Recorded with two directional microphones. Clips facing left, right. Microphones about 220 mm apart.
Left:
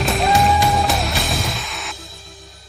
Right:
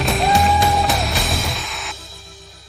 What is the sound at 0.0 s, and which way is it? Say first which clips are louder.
Music: even; centre (ahead or behind).